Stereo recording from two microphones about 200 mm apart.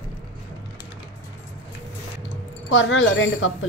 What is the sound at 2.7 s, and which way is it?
Speech, 70° left (ahead or behind).